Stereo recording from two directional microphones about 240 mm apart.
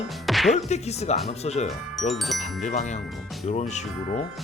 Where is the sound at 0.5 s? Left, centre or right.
Left.